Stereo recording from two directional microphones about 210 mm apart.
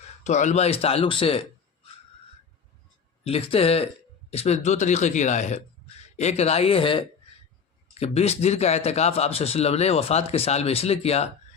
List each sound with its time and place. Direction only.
0.3 s speech: 35° left (ahead or behind)
3.2 s a man's voice: 30° left (ahead or behind)